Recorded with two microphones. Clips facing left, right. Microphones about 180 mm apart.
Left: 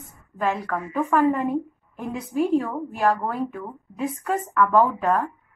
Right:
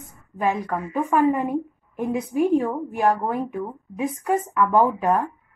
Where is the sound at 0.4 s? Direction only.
15° right (ahead or behind).